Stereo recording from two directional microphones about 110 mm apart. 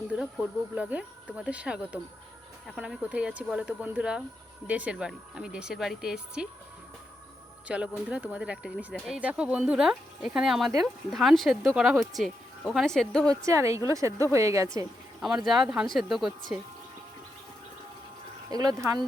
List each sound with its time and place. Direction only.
0.1 s speech: 10° right (ahead or behind)
7.7 s speech: 10° right (ahead or behind); by 13.3 s 5° left (ahead or behind)
13.3 s a woman's voice: 30° right (ahead or behind)
15.4 s speech: 5° right (ahead or behind)
18.5 s speech: 35° right (ahead or behind)